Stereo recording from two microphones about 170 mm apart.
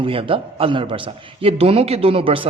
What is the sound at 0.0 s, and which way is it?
A man's voice, 30° right (ahead or behind).